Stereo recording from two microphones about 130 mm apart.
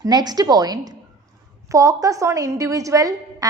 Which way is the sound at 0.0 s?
30° right (ahead or behind).